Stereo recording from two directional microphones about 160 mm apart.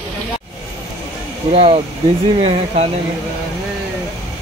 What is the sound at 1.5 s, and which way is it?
Speech, 40° right (ahead or behind).